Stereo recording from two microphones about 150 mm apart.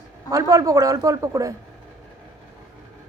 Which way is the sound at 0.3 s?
25° right (ahead or behind).